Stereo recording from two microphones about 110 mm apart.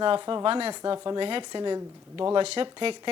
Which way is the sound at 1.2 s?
50° right (ahead or behind).